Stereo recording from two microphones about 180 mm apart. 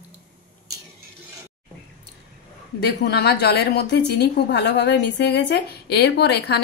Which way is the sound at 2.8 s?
65° left (ahead or behind).